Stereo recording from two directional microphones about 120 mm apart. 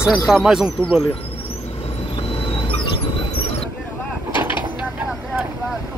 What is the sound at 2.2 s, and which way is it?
Train, 45° left (ahead or behind).